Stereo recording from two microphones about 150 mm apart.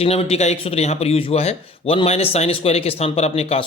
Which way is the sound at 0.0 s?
40° left (ahead or behind).